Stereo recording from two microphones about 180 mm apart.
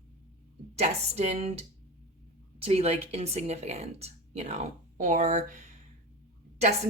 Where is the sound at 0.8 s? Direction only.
35° right (ahead or behind).